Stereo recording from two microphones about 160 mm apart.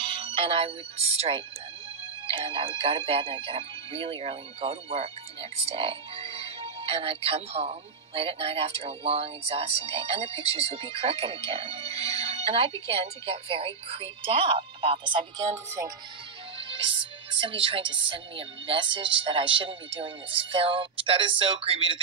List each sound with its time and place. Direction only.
0.0 s speech: 35° right (ahead or behind)
15.5 s speech: 20° right (ahead or behind)
16.5 s speech: 35° right (ahead or behind)